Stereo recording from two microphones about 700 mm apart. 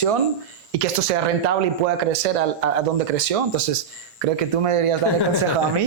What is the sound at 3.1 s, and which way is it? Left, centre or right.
Speech, right.